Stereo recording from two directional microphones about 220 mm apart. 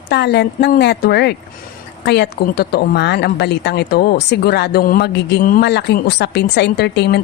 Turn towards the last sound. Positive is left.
turn(degrees=50)  # may be behind; listen again after turning